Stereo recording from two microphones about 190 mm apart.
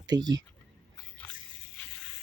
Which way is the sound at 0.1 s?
20° right (ahead or behind).